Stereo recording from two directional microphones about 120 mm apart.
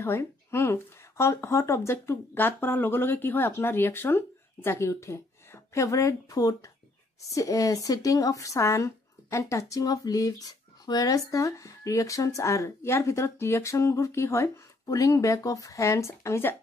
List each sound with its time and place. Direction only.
0.0 s a woman's voice: 20° left (ahead or behind)